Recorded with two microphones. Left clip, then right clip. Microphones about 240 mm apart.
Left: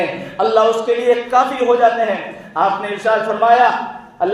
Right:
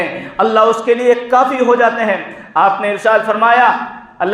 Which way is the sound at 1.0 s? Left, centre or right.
Right.